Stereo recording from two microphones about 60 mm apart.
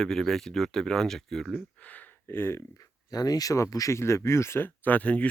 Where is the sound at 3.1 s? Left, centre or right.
Left.